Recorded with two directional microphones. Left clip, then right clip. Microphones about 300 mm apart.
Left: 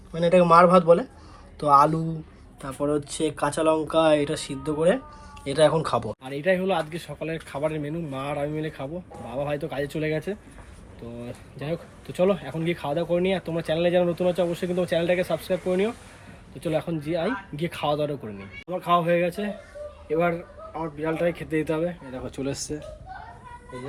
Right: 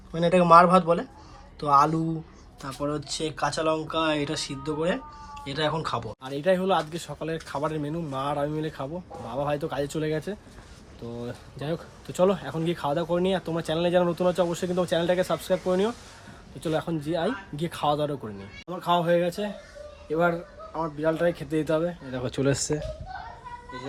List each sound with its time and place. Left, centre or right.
0.1 s speech: centre
21.0 s speech: centre
22.1 s speech: right